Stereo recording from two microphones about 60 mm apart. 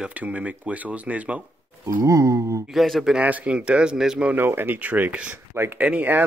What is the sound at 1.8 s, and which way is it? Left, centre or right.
Speech, right.